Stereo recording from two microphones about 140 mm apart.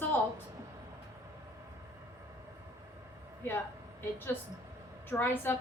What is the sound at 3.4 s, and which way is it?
Speech, 15° left (ahead or behind).